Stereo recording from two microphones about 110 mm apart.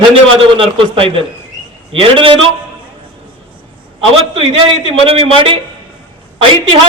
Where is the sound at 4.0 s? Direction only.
55° right (ahead or behind).